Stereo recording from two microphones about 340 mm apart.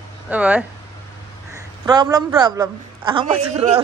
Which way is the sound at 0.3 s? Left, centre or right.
Centre.